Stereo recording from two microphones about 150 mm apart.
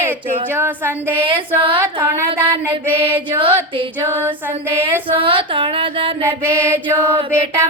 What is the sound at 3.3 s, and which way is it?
Speech, 35° right (ahead or behind).